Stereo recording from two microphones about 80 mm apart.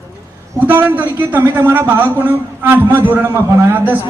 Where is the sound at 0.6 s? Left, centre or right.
Right.